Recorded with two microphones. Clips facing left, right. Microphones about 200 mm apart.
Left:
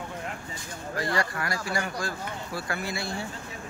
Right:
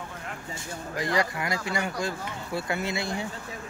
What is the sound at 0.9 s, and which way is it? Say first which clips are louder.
Speech: right 1 dB; 20° right (ahead or behind).